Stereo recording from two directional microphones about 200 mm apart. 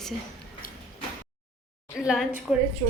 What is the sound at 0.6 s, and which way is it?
Sliding door, 45° left (ahead or behind).